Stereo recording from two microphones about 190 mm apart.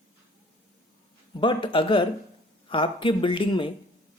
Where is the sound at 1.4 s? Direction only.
25° left (ahead or behind).